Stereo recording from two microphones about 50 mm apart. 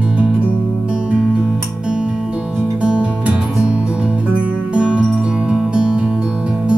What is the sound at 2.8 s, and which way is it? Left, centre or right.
Music, right.